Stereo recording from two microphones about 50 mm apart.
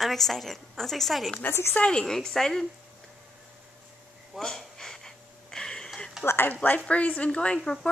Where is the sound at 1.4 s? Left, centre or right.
Left.